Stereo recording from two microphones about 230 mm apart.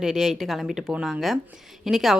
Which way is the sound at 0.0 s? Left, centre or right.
Centre.